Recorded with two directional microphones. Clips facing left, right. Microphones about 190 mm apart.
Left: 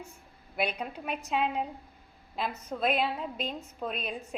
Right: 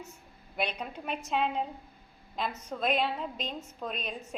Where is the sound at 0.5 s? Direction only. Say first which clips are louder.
Left 2 dB; 10° left (ahead or behind).